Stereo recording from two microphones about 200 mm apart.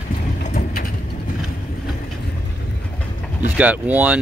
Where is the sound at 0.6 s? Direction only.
45° left (ahead or behind).